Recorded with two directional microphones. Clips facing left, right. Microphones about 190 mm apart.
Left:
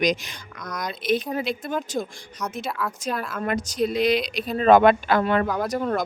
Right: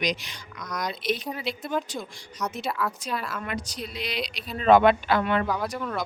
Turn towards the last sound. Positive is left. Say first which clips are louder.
# left 6 dB
turn(degrees=40)  # may be behind; listen again after turning